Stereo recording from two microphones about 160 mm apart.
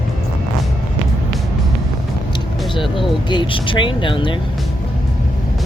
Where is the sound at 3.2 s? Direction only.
30° left (ahead or behind).